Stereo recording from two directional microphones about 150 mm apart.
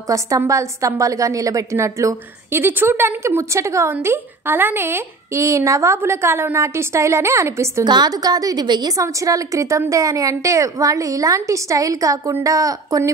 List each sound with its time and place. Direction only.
0.0 s a woman's voice: 20° right (ahead or behind)